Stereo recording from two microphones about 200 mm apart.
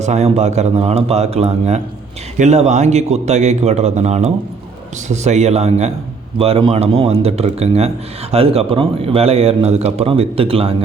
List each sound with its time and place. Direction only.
0.0 s a man's voice: 35° right (ahead or behind)